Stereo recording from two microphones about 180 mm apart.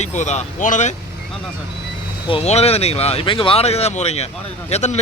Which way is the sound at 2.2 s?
35° left (ahead or behind).